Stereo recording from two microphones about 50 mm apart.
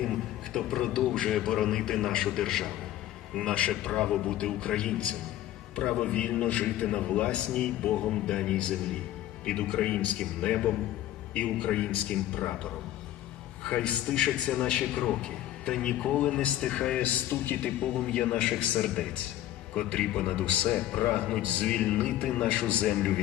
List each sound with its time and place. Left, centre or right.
0.0 s a sound: centre
1.3 s a man's voice: centre
3.7 s a man's voice: centre
13.7 s a man's voice: centre
19.7 s a man's voice: centre